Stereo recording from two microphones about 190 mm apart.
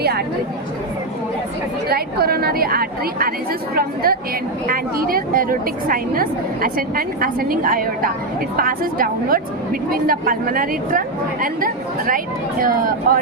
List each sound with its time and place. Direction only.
0.0 s speech: 55° right (ahead or behind)
1.9 s a woman's voice: 55° right (ahead or behind)